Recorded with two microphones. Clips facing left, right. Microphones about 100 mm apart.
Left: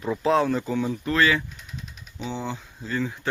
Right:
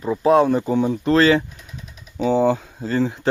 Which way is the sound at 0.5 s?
20° right (ahead or behind).